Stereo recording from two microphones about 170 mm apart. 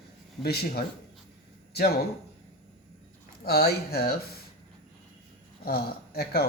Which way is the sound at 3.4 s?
70° left (ahead or behind).